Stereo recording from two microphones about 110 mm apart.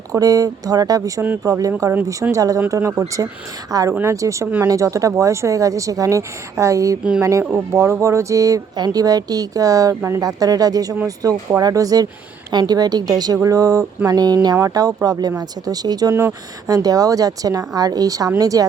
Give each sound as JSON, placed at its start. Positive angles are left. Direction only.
{"t": 0.1, "sound": "a woman's voice", "side_deg": -30}